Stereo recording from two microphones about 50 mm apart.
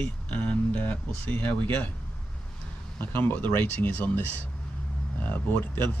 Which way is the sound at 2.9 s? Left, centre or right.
Left.